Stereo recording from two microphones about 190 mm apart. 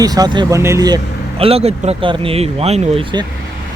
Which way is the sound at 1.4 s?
30° right (ahead or behind).